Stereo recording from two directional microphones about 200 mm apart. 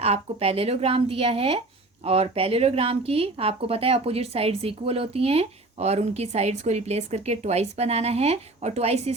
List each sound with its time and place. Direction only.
0.0 s a woman's voice: 30° right (ahead or behind)